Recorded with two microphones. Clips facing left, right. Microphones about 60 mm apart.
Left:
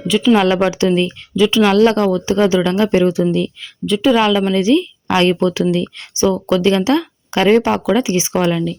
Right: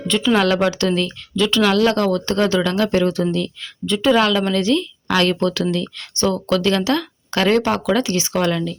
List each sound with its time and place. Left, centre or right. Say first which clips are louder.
0.1 s speech: left 5 dB; centre
0.3 s a woman's voice: left 3 dB; left
1.7 s a woman's voice: left 4 dB; left
3.6 s a woman's voice: left 4 dB; centre